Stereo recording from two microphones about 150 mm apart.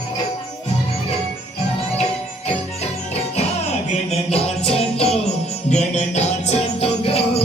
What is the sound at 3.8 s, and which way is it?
Music, 45° left (ahead or behind).